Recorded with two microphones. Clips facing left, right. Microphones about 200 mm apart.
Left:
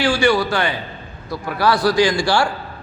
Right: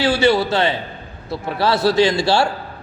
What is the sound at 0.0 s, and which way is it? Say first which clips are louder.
A man's voice: right 1 dB; 20° right (ahead or behind).